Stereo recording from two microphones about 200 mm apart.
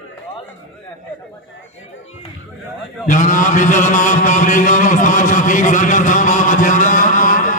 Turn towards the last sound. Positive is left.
turn(degrees=40)  # may be behind; listen again after turning